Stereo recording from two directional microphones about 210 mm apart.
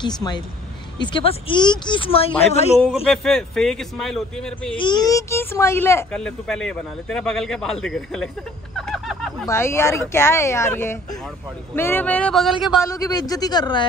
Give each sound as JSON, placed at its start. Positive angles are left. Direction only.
{"t": 0.0, "sound": "speech", "side_deg": 20}
{"t": 2.8, "sound": "speech", "side_deg": 0}
{"t": 4.7, "sound": "speech", "side_deg": 20}
{"t": 8.7, "sound": "a sound", "side_deg": 0}
{"t": 9.5, "sound": "speech", "side_deg": 10}
{"t": 12.8, "sound": "speech", "side_deg": 15}